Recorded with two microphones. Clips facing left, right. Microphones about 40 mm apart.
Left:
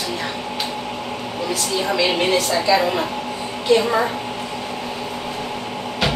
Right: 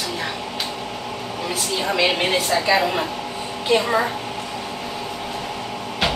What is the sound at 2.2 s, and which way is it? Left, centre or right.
Speech, centre.